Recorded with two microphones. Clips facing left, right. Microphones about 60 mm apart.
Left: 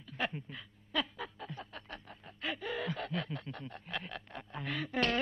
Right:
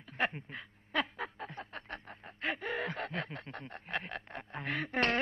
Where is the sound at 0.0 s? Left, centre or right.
Right.